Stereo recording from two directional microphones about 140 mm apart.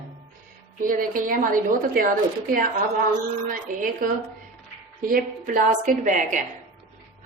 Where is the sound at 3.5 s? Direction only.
75° right (ahead or behind).